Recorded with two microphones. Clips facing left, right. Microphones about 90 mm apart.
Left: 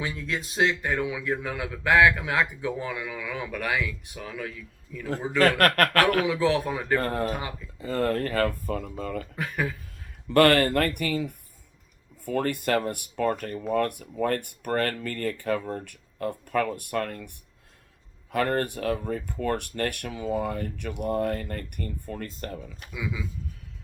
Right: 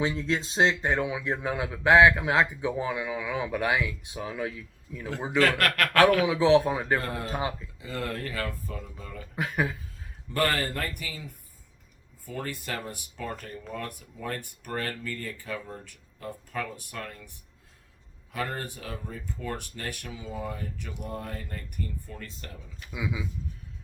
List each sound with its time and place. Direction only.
0.0 s a man's voice: 25° right (ahead or behind)
5.4 s speech: 45° left (ahead or behind)
6.2 s a man's voice: 20° right (ahead or behind)
7.0 s speech: 45° left (ahead or behind)
7.3 s a man's voice: 25° right (ahead or behind)
7.8 s speech: 45° left (ahead or behind); by 9.2 s 60° left (ahead or behind)
9.3 s speech: 20° right (ahead or behind)
10.2 s speech: 65° left (ahead or behind)
22.9 s a man's voice: 20° right (ahead or behind)